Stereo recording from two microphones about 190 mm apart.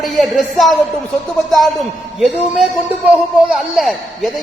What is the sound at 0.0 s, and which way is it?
A man's voice, centre (ahead or behind).